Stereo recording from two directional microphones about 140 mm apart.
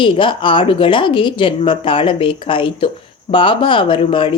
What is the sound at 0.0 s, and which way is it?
Speech, 35° left (ahead or behind).